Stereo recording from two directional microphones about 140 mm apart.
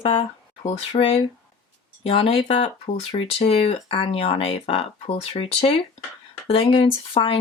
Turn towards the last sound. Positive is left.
turn(degrees=40)  # may be behind; listen again after turning